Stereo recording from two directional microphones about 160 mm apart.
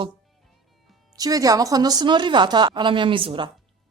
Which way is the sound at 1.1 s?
25° right (ahead or behind).